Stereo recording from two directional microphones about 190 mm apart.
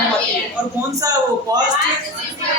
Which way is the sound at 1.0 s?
20° right (ahead or behind).